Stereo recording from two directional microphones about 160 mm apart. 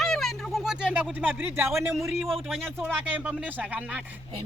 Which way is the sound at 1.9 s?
Centre (ahead or behind).